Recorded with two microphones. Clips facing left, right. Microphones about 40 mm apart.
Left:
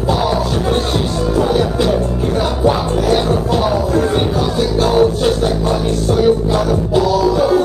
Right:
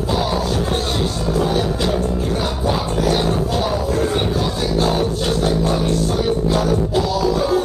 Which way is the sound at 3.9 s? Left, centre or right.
Centre.